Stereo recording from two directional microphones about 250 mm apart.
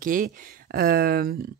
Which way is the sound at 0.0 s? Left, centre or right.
Right.